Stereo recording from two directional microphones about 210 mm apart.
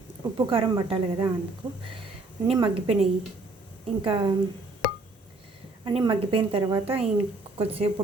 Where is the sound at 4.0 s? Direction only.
25° right (ahead or behind).